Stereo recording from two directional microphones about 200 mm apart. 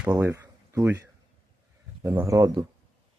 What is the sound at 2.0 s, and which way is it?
Speech, 10° right (ahead or behind).